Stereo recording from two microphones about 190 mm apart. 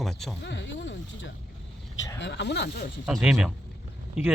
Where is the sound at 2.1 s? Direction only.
65° left (ahead or behind).